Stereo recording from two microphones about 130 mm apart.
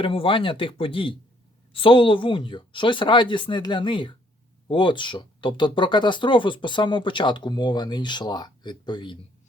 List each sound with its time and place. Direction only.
0.0 s speech: 45° left (ahead or behind)